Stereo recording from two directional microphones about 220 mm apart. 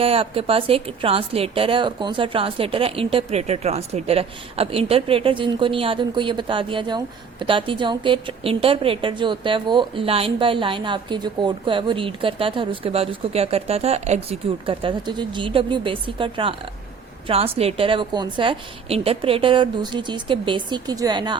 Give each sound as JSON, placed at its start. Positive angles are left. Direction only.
{"t": 0.0, "sound": "a woman's voice", "side_deg": -25}